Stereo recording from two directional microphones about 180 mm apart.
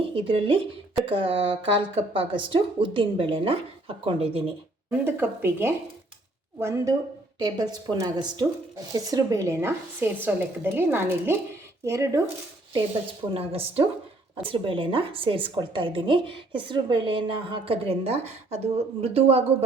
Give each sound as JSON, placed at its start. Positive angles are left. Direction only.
{"t": 0.2, "sound": "a woman's voice", "side_deg": -30}
{"t": 4.9, "sound": "a woman's voice", "side_deg": -10}
{"t": 13.3, "sound": "a woman's voice", "side_deg": -30}